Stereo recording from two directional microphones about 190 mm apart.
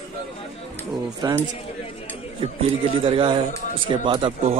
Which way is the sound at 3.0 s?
25° right (ahead or behind).